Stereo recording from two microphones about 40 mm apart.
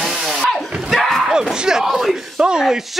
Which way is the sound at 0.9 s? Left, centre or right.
Centre.